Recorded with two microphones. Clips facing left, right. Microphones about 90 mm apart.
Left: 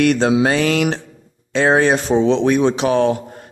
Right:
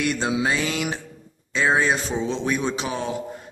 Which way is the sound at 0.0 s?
65° left (ahead or behind).